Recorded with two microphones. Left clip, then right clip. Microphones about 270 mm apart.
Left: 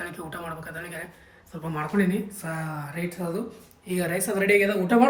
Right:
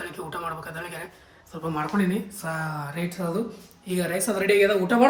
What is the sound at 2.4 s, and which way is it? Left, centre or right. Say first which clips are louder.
A woman's voice: right 3 dB; centre.